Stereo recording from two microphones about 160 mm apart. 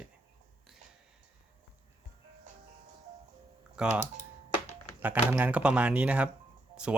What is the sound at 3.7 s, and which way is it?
Speech, 5° right (ahead or behind).